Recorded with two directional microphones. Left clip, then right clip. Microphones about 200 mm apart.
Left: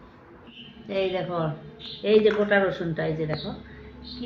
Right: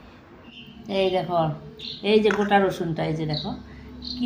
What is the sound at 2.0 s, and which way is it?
Speech, 50° right (ahead or behind).